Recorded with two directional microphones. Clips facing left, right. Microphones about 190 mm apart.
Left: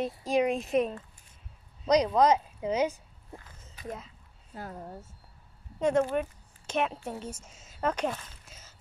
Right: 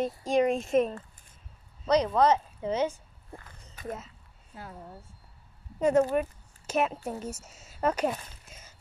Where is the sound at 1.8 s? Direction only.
15° left (ahead or behind).